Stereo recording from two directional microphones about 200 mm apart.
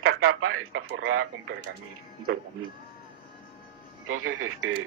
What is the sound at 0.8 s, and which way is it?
Speech, 80° right.